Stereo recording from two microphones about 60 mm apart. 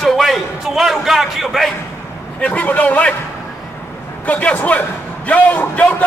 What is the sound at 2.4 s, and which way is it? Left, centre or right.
Speech, left.